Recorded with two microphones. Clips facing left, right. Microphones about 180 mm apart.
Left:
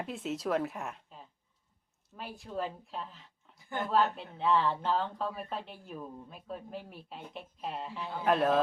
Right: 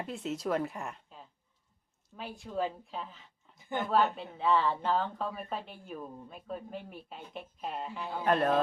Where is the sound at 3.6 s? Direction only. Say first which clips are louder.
Right 2 dB; 20° right (ahead or behind).